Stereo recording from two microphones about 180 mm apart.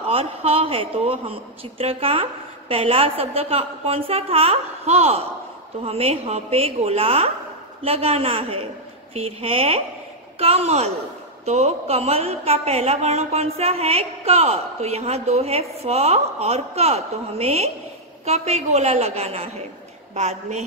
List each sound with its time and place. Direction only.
0.0 s a woman's voice: 30° right (ahead or behind)